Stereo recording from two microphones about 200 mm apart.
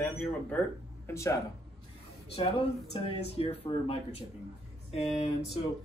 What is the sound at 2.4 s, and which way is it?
Speech, 30° left (ahead or behind).